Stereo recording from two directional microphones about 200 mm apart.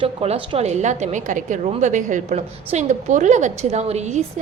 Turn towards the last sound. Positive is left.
turn(degrees=-35)  # may be behind; listen again after turning